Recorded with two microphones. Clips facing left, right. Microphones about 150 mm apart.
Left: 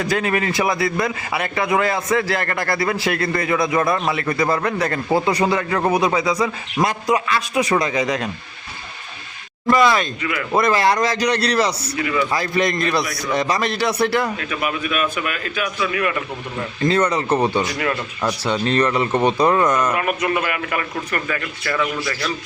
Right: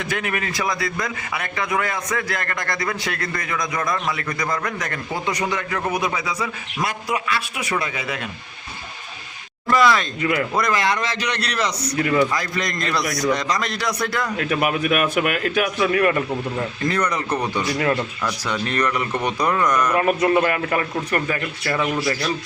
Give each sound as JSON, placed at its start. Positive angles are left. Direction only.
{"t": 0.0, "sound": "a man's voice", "side_deg": 35}
{"t": 9.6, "sound": "a man's voice", "side_deg": 25}
{"t": 10.2, "sound": "speech", "side_deg": -40}
{"t": 10.5, "sound": "a man's voice", "side_deg": 30}
{"t": 11.9, "sound": "speech", "side_deg": -45}
{"t": 12.3, "sound": "a man's voice", "side_deg": 25}
{"t": 14.3, "sound": "a man's voice", "side_deg": -50}
{"t": 15.8, "sound": "speech", "side_deg": -40}
{"t": 16.9, "sound": "a man's voice", "side_deg": 30}
{"t": 19.9, "sound": "speech", "side_deg": -35}